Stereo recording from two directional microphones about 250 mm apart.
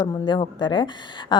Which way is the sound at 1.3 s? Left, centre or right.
Centre.